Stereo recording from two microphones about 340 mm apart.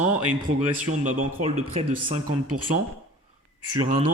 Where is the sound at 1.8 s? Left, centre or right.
Right.